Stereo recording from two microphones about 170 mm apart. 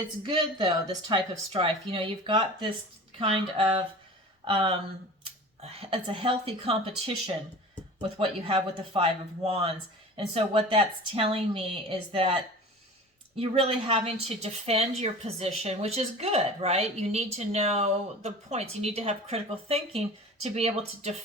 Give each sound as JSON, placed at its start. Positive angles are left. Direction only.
{"t": 0.6, "sound": "a woman's voice", "side_deg": -25}
{"t": 8.2, "sound": "a woman's voice", "side_deg": -30}